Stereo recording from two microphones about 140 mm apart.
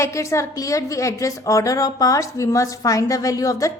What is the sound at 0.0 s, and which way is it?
A woman's voice, 20° left (ahead or behind).